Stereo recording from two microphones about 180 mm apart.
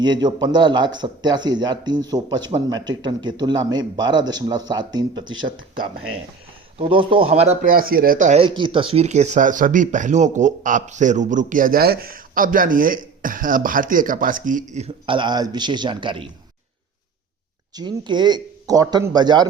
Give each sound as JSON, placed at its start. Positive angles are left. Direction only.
{"t": 0.0, "sound": "a man's voice", "side_deg": -25}
{"t": 6.7, "sound": "speech", "side_deg": -30}
{"t": 7.7, "sound": "speech", "side_deg": -55}
{"t": 8.4, "sound": "speech", "side_deg": -25}
{"t": 17.7, "sound": "a man's voice", "side_deg": -25}